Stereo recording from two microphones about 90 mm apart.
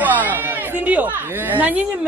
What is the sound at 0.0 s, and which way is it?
Speech, 20° right (ahead or behind).